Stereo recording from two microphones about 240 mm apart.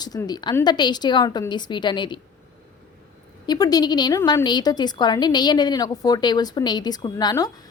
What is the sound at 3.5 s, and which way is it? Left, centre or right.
A woman's voice, centre.